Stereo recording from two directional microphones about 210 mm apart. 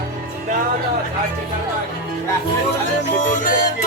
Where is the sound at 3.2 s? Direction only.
35° left (ahead or behind).